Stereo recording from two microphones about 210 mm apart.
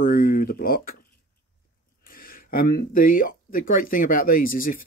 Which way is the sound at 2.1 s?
45° left (ahead or behind).